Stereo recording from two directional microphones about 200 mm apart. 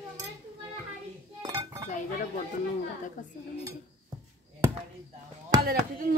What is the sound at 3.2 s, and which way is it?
Speech, 40° left (ahead or behind).